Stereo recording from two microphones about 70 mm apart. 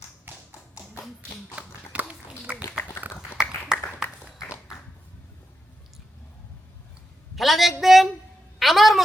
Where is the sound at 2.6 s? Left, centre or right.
Left.